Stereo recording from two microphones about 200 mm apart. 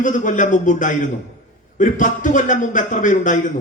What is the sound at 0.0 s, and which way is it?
A man's voice, 40° left (ahead or behind).